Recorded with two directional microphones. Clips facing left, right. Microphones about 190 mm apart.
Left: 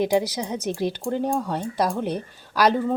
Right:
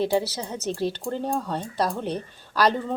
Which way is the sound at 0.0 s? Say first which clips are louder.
Left 2 dB; 15° left (ahead or behind).